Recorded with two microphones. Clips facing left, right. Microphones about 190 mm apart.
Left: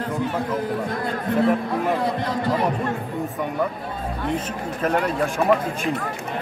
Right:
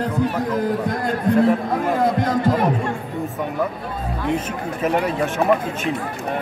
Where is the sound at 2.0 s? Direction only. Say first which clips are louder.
Right 5 dB; 45° right (ahead or behind).